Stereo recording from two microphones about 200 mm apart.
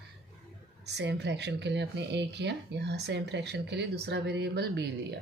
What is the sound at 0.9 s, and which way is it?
Speech, 55° right (ahead or behind).